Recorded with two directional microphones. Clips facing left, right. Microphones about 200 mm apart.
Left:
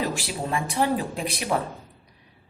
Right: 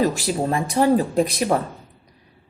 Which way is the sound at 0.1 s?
40° right (ahead or behind).